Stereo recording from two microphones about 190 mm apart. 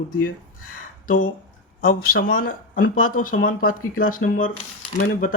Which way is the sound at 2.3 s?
50° left (ahead or behind).